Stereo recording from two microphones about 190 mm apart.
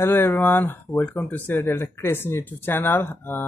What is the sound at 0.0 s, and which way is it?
Speech, 10° left (ahead or behind).